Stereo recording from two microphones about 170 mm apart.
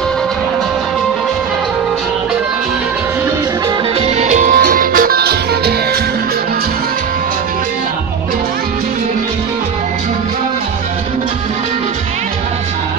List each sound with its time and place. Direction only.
4.0 s music: 40° right (ahead or behind); by 5.8 s 70° right (ahead or behind)